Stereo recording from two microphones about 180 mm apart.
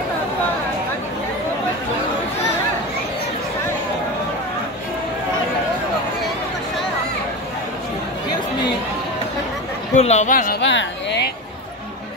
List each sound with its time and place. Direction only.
9.9 s speech: 40° left (ahead or behind)
10.6 s speech: 80° left